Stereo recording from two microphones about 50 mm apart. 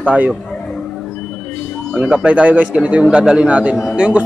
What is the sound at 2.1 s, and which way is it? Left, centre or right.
Speech, right.